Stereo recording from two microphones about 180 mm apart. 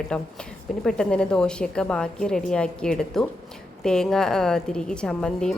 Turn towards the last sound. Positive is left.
turn(degrees=5)  # may be behind; listen again after turning